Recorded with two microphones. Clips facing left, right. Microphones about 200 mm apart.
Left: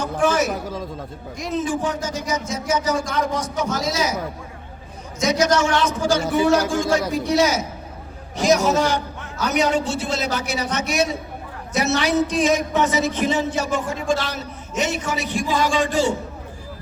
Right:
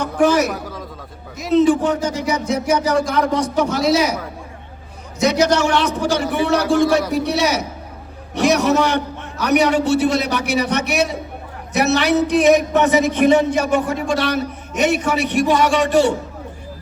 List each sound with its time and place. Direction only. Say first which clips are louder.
0.0 s a man's voice: right 4 dB; 65° right (ahead or behind)
5.2 s speech: right 3 dB; 65° right (ahead or behind)